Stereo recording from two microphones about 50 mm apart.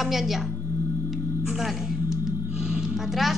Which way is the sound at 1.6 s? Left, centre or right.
Centre.